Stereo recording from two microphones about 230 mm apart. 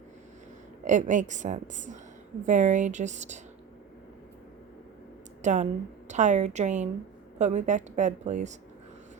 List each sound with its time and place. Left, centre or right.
0.9 s a woman's voice: right
5.4 s a woman's voice: right